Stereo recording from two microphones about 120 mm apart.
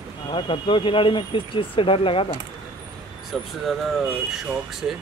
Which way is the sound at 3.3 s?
Centre (ahead or behind).